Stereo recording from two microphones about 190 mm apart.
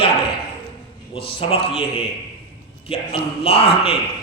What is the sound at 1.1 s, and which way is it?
A man's voice, 30° left (ahead or behind).